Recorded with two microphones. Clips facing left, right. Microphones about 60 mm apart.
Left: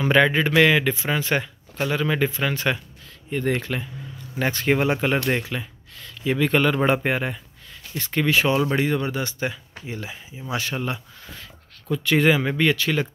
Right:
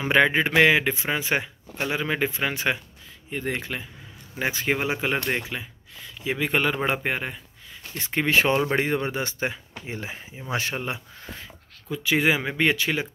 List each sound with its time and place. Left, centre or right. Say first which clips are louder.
0.0 s a man's voice: left 2 dB; right
3.3 s speech: left 5 dB; centre
6.8 s speech: left 5 dB; centre
8.0 s a man's voice: left 1 dB; right
11.9 s speech: left 3 dB; centre
12.5 s a man's voice: left 2 dB; right